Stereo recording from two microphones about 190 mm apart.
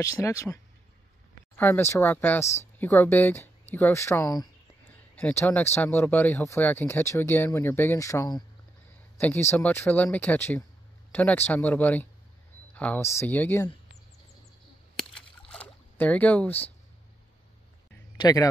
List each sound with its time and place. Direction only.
0.0 s speech: 15° left (ahead or behind)
1.6 s speech: 10° left (ahead or behind)
2.4 s speech: 35° left (ahead or behind)
2.8 s speech: 10° left (ahead or behind)
15.0 s a sound: 5° left (ahead or behind)
18.1 s a man's voice: 20° left (ahead or behind)